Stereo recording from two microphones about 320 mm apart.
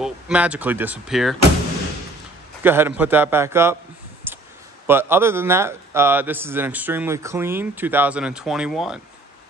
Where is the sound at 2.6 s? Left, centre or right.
Centre.